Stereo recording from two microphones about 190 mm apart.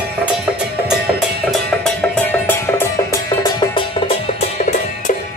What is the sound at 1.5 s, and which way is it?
Music, 5° left (ahead or behind).